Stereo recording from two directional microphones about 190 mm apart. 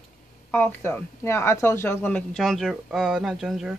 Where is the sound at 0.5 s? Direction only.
10° left (ahead or behind).